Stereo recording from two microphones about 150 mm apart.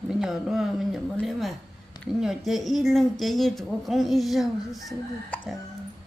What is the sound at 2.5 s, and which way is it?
Speech, centre (ahead or behind).